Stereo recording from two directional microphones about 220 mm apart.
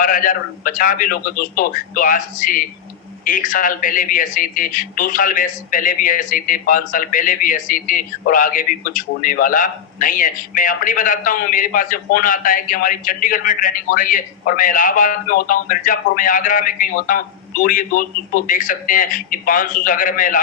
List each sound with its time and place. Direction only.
0.0 s speech: 40° left (ahead or behind)